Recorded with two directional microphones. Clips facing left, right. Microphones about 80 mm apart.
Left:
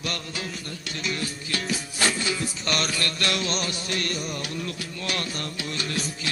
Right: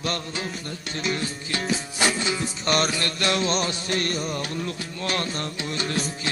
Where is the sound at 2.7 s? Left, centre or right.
Right.